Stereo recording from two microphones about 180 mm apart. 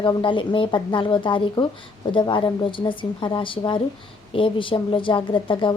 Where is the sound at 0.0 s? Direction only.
25° left (ahead or behind).